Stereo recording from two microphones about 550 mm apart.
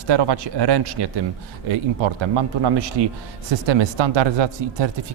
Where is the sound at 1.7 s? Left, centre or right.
Right.